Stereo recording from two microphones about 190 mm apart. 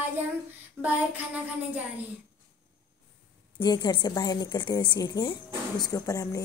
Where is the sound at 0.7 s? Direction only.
10° right (ahead or behind).